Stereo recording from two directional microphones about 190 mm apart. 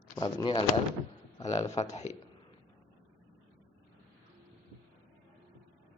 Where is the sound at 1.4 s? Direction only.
35° left (ahead or behind).